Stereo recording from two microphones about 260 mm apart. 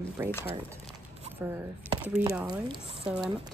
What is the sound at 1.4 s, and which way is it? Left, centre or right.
Speech, centre.